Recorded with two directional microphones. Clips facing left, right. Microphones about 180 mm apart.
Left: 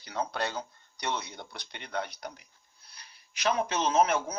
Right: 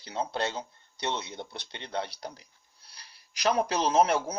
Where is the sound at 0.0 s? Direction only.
25° right (ahead or behind).